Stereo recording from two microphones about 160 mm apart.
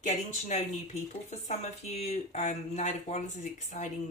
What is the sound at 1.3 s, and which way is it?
Speech, 45° left (ahead or behind).